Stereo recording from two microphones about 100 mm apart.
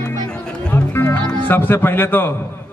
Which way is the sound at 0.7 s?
20° left (ahead or behind).